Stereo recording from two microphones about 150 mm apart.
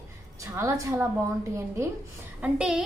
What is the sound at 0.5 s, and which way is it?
A woman's voice, 20° right (ahead or behind).